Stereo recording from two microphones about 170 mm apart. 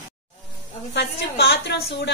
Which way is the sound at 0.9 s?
75° left (ahead or behind).